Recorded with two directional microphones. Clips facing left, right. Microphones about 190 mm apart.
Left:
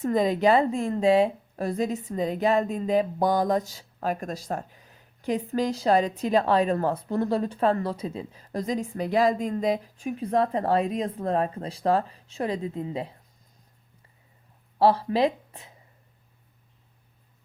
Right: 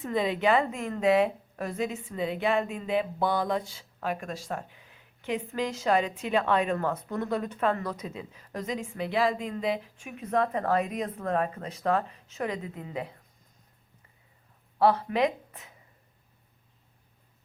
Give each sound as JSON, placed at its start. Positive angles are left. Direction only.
{"t": 0.0, "sound": "a woman's voice", "side_deg": 40}
{"t": 14.8, "sound": "speech", "side_deg": 30}